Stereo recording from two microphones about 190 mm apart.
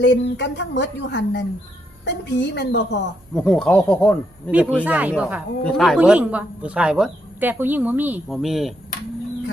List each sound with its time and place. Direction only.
0.0 s a woman's voice: 65° left (ahead or behind)
3.3 s speech: 5° left (ahead or behind)
4.8 s speech: 5° right (ahead or behind)
5.6 s speech: 5° left (ahead or behind)